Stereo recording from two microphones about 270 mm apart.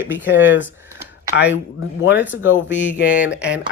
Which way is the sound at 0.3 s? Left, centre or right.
Left.